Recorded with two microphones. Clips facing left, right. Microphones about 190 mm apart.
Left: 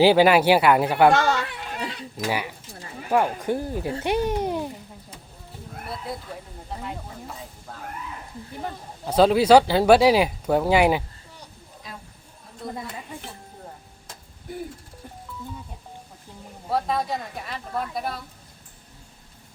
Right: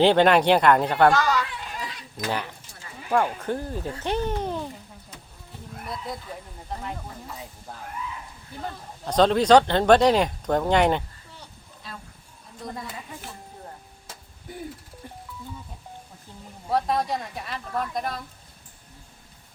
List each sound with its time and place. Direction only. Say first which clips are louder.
0.0 s speech: left 2 dB; 5° left (ahead or behind)
1.1 s a sound: left 2 dB; 25° left (ahead or behind)
2.1 s speech: left 1 dB; 5° left (ahead or behind)
7.7 s speech: even; 10° right (ahead or behind)
8.6 s speech: even; 5° left (ahead or behind)
12.6 s a woman's voice: left 2 dB; 5° left (ahead or behind)
16.6 s a woman's voice: right 1 dB; centre (ahead or behind)